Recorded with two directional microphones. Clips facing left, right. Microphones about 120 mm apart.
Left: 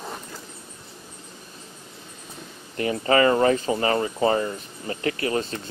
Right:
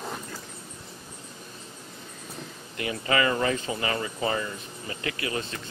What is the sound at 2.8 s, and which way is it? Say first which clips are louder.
Speech: left 6 dB; 35° left (ahead or behind).